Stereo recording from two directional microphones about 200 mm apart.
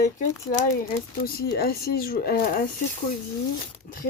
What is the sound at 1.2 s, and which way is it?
Speech, 50° left (ahead or behind).